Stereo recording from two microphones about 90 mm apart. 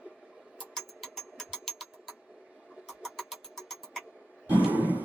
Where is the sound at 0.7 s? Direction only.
Centre (ahead or behind).